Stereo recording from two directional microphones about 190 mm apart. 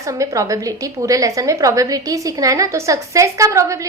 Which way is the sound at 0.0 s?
15° right (ahead or behind).